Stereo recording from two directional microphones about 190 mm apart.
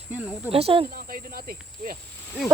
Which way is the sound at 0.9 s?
50° right (ahead or behind).